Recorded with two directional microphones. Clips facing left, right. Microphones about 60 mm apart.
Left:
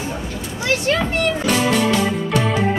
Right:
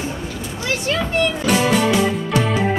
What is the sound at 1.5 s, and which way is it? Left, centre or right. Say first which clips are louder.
Music: right 1 dB; centre.